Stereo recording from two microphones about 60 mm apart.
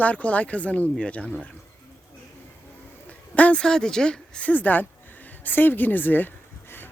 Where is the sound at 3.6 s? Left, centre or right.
Centre.